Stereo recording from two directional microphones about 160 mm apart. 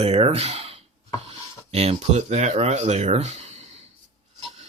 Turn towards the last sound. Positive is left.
turn(degrees=-45)  # may be behind; listen again after turning